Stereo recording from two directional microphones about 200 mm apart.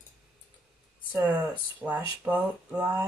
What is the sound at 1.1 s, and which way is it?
Speech, 10° right (ahead or behind).